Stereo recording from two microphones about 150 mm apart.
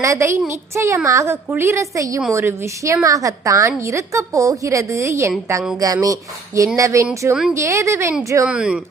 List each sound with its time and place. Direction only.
0.0 s a woman's voice: 20° right (ahead or behind)
8.4 s speech: 5° right (ahead or behind)